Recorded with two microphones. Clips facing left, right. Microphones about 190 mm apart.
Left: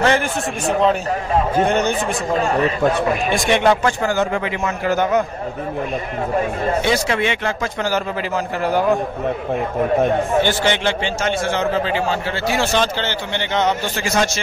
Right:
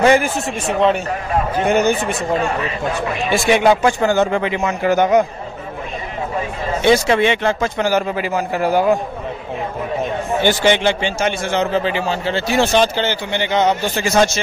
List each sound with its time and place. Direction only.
0.0 s a man's voice: 15° right (ahead or behind)
1.7 s a man's voice: 5° right (ahead or behind)
2.4 s a man's voice: 40° left (ahead or behind)
3.3 s a man's voice: 5° right (ahead or behind)
4.0 s speech: 25° right (ahead or behind)
6.9 s speech: 25° right (ahead or behind)
7.8 s a man's voice: 15° right (ahead or behind)
10.4 s a man's voice: 15° right (ahead or behind)